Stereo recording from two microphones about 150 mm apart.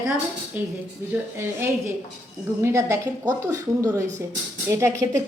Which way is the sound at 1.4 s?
15° right (ahead or behind).